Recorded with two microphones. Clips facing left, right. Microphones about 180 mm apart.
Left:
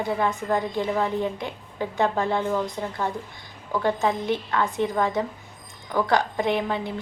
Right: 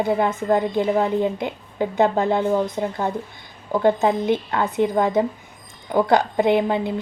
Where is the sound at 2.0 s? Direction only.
40° right (ahead or behind).